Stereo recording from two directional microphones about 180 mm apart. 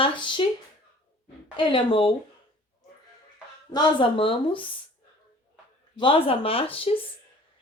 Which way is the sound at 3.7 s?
25° left (ahead or behind).